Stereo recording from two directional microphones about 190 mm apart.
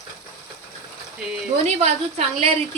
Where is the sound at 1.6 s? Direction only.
35° right (ahead or behind).